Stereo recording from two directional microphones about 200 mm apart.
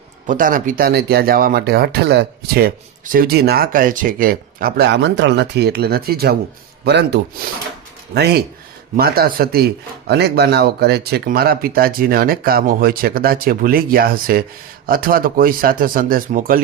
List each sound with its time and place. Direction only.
0.3 s speech: 45° right (ahead or behind)